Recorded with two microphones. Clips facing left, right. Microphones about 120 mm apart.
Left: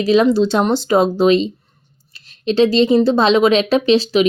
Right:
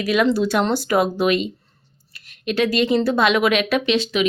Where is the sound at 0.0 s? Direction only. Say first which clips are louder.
Left 5 dB; 30° left (ahead or behind).